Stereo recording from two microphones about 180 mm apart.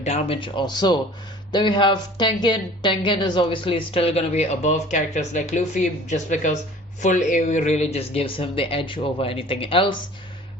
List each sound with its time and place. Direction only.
0.0 s a woman's voice: 35° left (ahead or behind)